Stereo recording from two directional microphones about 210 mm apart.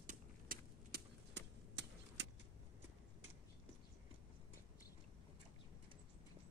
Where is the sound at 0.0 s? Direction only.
40° right (ahead or behind); by 2.2 s 55° right (ahead or behind).